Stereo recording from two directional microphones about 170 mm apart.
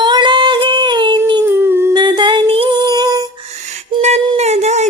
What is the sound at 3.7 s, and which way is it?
Music, 40° right (ahead or behind).